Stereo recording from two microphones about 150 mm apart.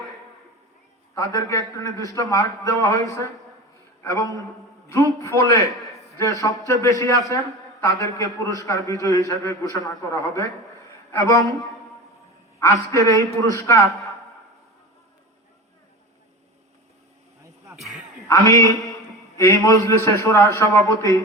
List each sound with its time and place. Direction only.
1.1 s a man's voice: 20° left (ahead or behind)
5.7 s a sound: centre (ahead or behind)
6.1 s a man's voice: 20° left (ahead or behind)
11.1 s a man's voice: 20° left (ahead or behind)
12.5 s a man's voice: 20° left (ahead or behind)
17.7 s a sound: centre (ahead or behind)
18.4 s a man's voice: 20° left (ahead or behind)